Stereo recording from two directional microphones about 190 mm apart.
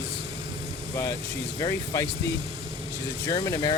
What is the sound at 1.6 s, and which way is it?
Speech, 20° left (ahead or behind).